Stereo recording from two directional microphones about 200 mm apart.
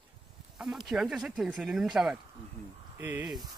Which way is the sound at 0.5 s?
Centre (ahead or behind).